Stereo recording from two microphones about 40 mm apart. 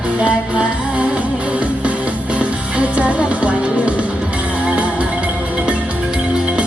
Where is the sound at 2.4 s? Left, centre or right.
Right.